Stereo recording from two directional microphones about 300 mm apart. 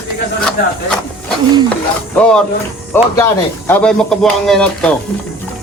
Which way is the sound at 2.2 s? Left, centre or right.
Centre.